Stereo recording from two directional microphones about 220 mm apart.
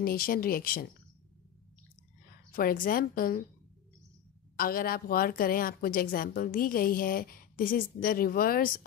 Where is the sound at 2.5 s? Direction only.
40° left (ahead or behind).